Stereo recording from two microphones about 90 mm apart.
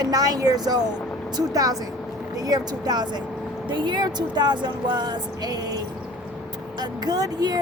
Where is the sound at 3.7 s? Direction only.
60° right (ahead or behind).